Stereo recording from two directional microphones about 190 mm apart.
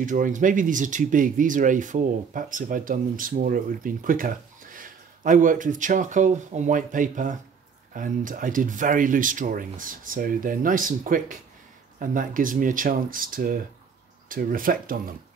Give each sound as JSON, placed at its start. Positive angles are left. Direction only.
{"t": 0.0, "sound": "speech", "side_deg": -40}